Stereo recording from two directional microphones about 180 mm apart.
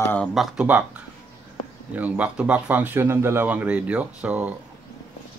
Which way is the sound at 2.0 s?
10° right (ahead or behind).